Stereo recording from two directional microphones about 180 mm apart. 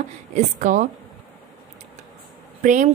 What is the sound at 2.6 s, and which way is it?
Speech, 45° right (ahead or behind).